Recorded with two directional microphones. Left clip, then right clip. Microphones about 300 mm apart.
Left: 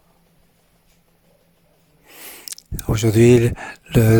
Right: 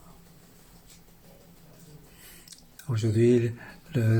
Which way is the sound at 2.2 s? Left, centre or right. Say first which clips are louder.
Left 15 dB; left.